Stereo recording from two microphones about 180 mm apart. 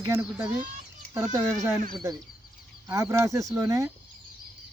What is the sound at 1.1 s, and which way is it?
Speech, 20° right (ahead or behind).